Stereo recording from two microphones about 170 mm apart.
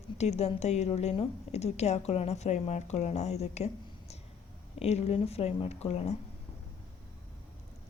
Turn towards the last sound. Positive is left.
turn(degrees=35)  # may be behind; listen again after turning